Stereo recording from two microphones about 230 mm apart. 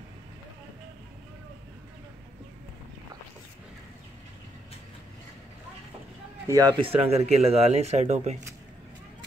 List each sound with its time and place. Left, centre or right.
6.4 s speech: centre